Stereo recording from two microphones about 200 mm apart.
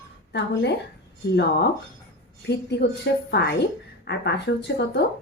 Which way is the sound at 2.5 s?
55° left (ahead or behind).